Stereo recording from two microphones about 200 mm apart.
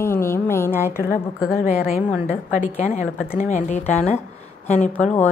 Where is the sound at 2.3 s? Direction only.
35° left (ahead or behind).